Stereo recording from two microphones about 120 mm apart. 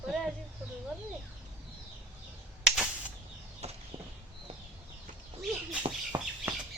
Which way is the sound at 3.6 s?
60° right (ahead or behind).